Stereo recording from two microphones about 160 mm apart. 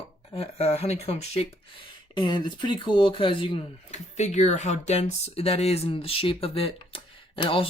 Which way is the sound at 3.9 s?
45° left (ahead or behind).